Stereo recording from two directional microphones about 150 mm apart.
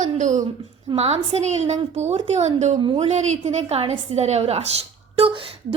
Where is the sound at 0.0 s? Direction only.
55° right (ahead or behind).